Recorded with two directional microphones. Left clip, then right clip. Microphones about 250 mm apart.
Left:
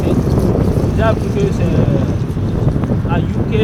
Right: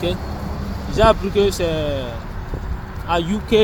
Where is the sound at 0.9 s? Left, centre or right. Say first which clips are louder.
Right 6 dB; centre.